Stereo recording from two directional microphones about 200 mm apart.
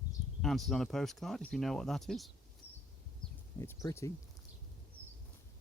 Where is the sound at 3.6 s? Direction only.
15° left (ahead or behind).